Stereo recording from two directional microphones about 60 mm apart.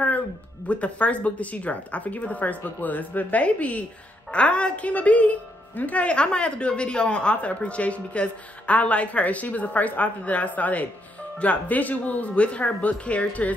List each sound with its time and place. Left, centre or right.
0.7 s a woman's voice: left